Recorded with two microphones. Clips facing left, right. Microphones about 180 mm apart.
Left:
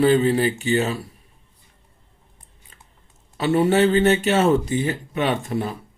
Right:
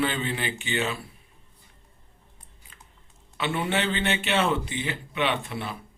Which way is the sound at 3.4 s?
40° left (ahead or behind).